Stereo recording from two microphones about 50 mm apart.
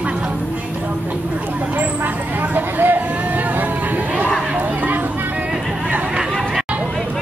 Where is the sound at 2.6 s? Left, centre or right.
Right.